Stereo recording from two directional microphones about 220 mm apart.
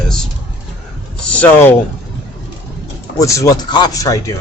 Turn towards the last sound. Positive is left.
turn(degrees=15)  # may be behind; listen again after turning